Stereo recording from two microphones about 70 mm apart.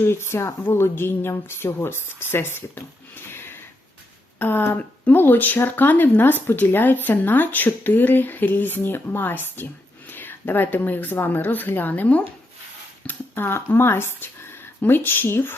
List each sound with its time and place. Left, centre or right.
0.0 s speech: left
3.3 s a sound: left
4.4 s speech: left